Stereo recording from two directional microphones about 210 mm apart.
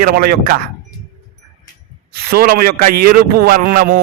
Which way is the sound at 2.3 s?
45° right (ahead or behind).